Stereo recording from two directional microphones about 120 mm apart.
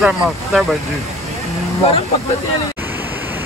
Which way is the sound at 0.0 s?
Centre (ahead or behind).